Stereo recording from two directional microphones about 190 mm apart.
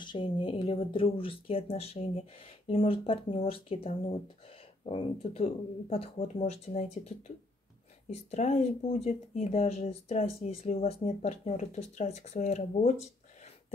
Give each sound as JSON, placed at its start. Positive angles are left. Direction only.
{"t": 0.0, "sound": "speech", "side_deg": 25}